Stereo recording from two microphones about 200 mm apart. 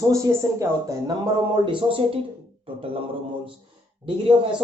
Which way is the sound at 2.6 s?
30° right (ahead or behind).